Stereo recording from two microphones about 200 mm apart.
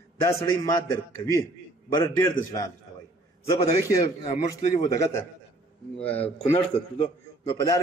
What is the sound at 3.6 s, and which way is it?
A man's voice, 35° left (ahead or behind).